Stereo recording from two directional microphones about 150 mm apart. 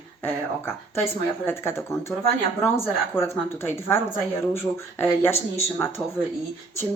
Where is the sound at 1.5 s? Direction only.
15° left (ahead or behind).